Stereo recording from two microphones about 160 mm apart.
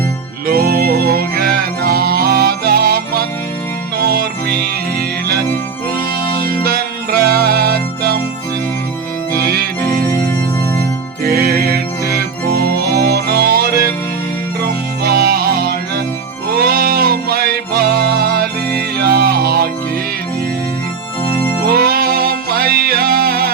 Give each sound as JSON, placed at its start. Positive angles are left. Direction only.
{"t": 0.4, "sound": "music", "side_deg": -70}
{"t": 9.3, "sound": "music", "side_deg": -70}
{"t": 11.3, "sound": "music", "side_deg": -70}
{"t": 15.0, "sound": "music", "side_deg": -70}
{"t": 21.7, "sound": "music", "side_deg": -70}